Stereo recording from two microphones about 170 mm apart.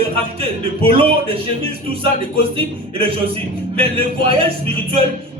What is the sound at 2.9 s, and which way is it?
A man's voice, 35° right (ahead or behind).